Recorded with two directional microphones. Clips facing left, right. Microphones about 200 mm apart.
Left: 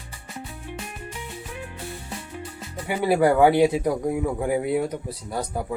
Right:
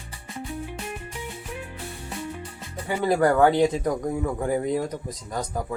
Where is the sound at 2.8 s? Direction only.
10° left (ahead or behind).